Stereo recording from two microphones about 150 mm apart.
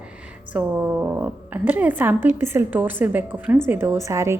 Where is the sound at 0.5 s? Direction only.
10° right (ahead or behind).